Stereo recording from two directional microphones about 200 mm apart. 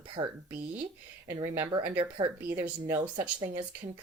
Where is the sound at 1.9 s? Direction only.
25° right (ahead or behind).